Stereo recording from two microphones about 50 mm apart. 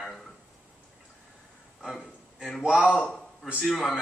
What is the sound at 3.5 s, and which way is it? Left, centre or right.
Speech, centre.